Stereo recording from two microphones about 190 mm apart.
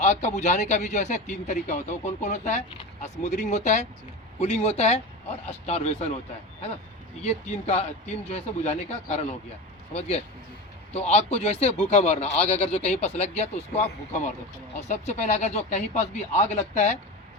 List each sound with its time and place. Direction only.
0.0 s a man's voice: 35° left (ahead or behind)
7.7 s a man's voice: 35° left (ahead or behind)